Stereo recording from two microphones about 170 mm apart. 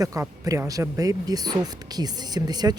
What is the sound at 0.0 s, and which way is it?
Speech, 20° right (ahead or behind).